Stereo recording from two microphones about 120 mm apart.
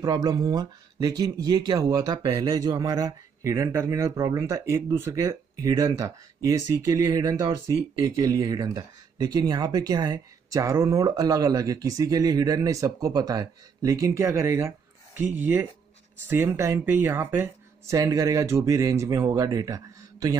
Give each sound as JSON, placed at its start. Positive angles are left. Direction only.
{"t": 0.0, "sound": "speech", "side_deg": -35}